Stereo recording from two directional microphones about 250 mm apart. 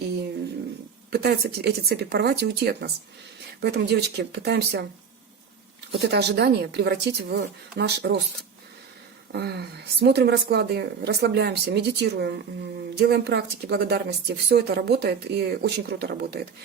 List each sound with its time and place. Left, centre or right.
1.1 s a woman's voice: right
6.1 s a woman's voice: right
9.3 s a woman's voice: right